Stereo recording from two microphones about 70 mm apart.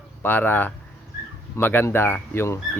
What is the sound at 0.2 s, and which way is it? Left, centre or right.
Speech, left.